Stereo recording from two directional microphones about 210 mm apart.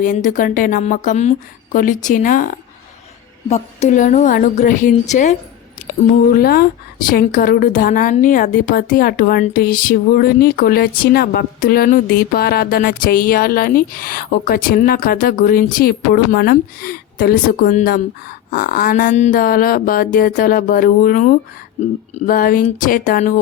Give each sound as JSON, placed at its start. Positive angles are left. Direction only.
{"t": 0.0, "sound": "a woman's voice", "side_deg": 40}
{"t": 6.2, "sound": "a woman's voice", "side_deg": 45}